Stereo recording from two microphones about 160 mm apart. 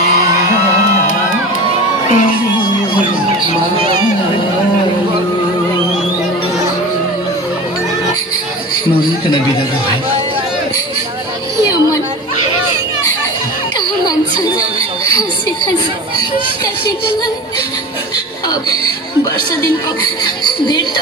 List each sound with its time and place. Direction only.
2.0 s speech: 50° left (ahead or behind)
20.4 s a woman's voice: 25° left (ahead or behind)